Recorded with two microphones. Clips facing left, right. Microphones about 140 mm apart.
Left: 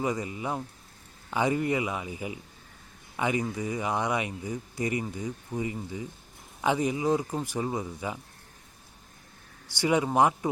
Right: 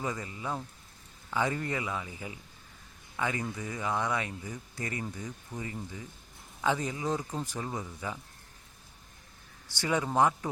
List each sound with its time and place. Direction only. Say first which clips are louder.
0.0 s speech: left 6 dB; 15° left (ahead or behind)
9.7 s speech: left 4 dB; 15° left (ahead or behind)